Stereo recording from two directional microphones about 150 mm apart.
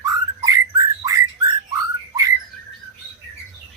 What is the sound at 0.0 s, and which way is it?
Bird, 25° right (ahead or behind).